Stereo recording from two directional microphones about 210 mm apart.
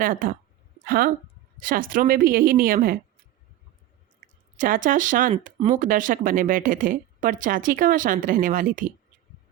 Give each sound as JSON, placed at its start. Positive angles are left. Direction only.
{"t": 0.0, "sound": "a woman's voice", "side_deg": -40}
{"t": 4.5, "sound": "speech", "side_deg": -40}